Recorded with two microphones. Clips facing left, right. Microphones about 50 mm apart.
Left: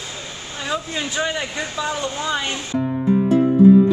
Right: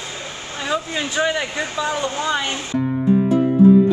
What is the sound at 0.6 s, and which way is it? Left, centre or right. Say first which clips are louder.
Speech: right 2 dB; centre.